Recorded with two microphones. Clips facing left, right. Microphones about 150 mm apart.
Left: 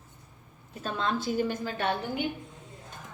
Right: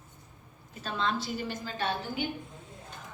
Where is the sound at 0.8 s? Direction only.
45° left (ahead or behind).